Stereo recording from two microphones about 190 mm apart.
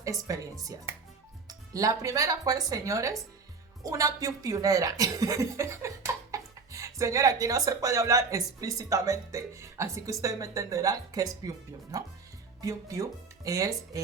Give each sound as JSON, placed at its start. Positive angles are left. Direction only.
{"t": 0.0, "sound": "speech", "side_deg": -15}
{"t": 1.5, "sound": "speech", "side_deg": -20}